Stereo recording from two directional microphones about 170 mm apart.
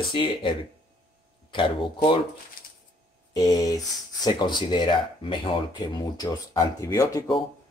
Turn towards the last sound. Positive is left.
turn(degrees=20)  # may be behind; listen again after turning